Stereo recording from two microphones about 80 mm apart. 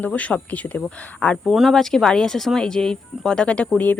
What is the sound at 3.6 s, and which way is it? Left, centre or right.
Speech, left.